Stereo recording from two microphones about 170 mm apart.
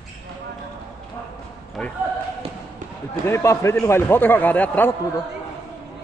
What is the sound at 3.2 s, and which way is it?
A man's voice, 15° left (ahead or behind).